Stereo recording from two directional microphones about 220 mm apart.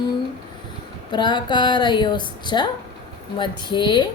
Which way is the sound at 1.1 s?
20° left (ahead or behind).